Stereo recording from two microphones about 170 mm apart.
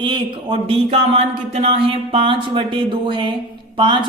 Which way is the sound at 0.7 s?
40° right (ahead or behind).